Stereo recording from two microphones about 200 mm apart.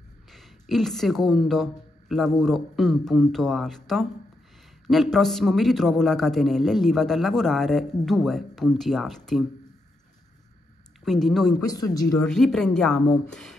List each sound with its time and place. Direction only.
0.3 s a woman's voice: centre (ahead or behind)
11.1 s a man's voice: centre (ahead or behind)
11.6 s speech: 20° left (ahead or behind)
12.3 s a man's voice: 5° left (ahead or behind)